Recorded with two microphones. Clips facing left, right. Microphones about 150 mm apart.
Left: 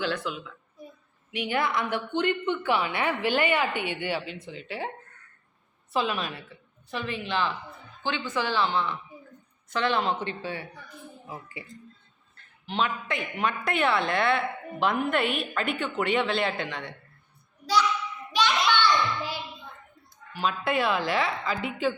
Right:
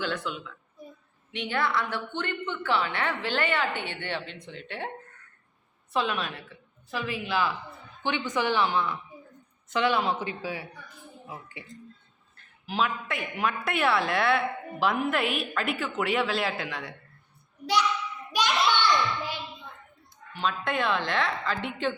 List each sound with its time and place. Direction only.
0.0 s a woman's voice: centre (ahead or behind)
5.9 s a woman's voice: centre (ahead or behind)
8.0 s a woman's voice: 15° right (ahead or behind); by 11.6 s centre (ahead or behind)
12.6 s a woman's voice: 5° right (ahead or behind)
18.3 s a sound: 10° right (ahead or behind)
20.3 s a woman's voice: 5° left (ahead or behind)